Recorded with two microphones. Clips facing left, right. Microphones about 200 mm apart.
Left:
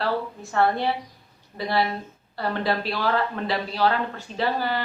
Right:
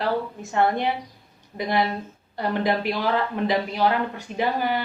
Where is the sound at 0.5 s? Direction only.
20° right (ahead or behind).